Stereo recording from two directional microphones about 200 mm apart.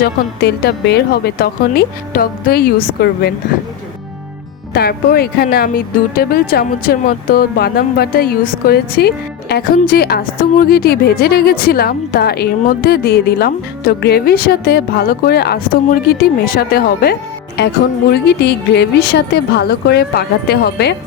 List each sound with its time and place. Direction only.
0.0 s speech: 55° left (ahead or behind)
4.7 s a woman's voice: 50° left (ahead or behind)